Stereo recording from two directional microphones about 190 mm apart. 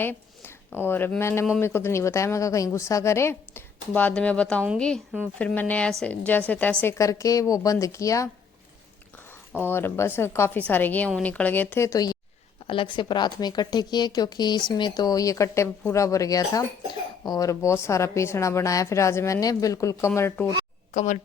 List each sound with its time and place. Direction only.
0.0 s a woman's voice: 10° left (ahead or behind)
9.5 s a woman's voice: 10° left (ahead or behind)
20.9 s speech: 40° left (ahead or behind)